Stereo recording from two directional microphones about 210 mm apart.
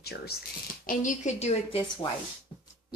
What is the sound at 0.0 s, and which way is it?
Speech, 50° left (ahead or behind).